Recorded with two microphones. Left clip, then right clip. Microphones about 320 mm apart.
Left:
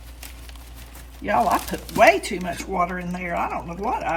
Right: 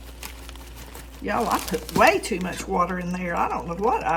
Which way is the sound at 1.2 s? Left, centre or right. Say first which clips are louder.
Left 4 dB; centre.